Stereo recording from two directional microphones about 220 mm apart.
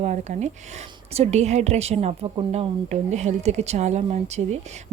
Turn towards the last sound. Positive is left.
turn(degrees=-30)  # may be behind; listen again after turning